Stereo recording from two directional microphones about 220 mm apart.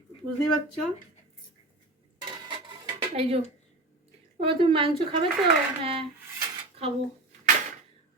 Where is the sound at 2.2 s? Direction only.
20° right (ahead or behind).